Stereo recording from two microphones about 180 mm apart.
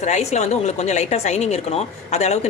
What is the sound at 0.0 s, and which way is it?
A woman's voice, 40° left (ahead or behind).